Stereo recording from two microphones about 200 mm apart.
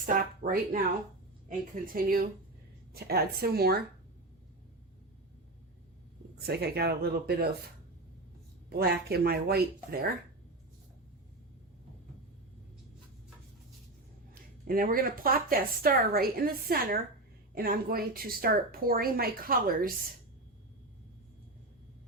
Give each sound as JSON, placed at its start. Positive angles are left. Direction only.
{"t": 0.0, "sound": "speech", "side_deg": -45}
{"t": 6.4, "sound": "speech", "side_deg": -55}
{"t": 8.7, "sound": "speech", "side_deg": -50}
{"t": 14.7, "sound": "speech", "side_deg": -45}